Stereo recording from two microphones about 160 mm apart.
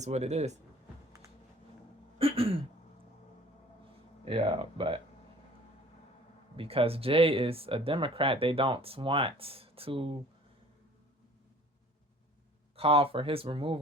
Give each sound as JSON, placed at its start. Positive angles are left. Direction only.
{"t": 0.0, "sound": "speech", "side_deg": -45}
{"t": 2.1, "sound": "a sound", "side_deg": -35}
{"t": 4.3, "sound": "speech", "side_deg": -35}
{"t": 6.6, "sound": "speech", "side_deg": -35}
{"t": 12.7, "sound": "speech", "side_deg": -35}